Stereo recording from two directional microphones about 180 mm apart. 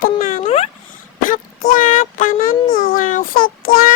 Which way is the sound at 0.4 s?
35° left (ahead or behind).